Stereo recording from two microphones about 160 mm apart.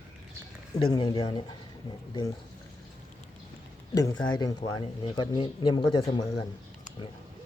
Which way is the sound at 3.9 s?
25° left (ahead or behind).